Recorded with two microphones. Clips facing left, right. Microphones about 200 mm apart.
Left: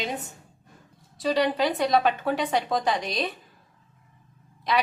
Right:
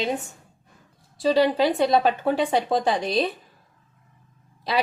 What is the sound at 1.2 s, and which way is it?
A woman's voice, 30° right (ahead or behind).